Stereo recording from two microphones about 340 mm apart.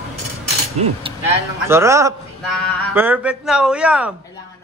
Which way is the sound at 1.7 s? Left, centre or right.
Centre.